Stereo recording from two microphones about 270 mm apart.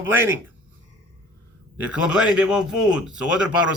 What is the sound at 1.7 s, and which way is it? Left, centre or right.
A man's voice, centre.